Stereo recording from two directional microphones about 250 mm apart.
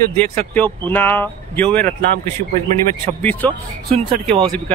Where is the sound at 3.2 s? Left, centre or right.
Centre.